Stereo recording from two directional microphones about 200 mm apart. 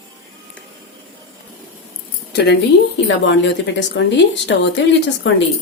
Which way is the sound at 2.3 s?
55° left (ahead or behind).